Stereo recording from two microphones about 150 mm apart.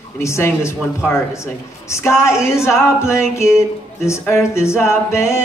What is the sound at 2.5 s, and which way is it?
Music, 20° left (ahead or behind).